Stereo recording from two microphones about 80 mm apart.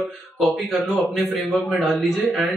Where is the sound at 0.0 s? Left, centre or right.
Centre.